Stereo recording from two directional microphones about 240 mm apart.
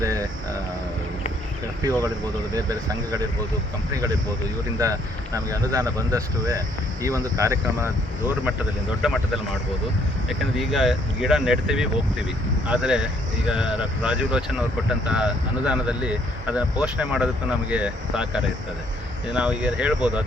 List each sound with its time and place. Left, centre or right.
0.0 s a sound: centre
2.0 s speech: centre
4.8 s speech: centre
9.0 s speech: centre
10.6 s speech: centre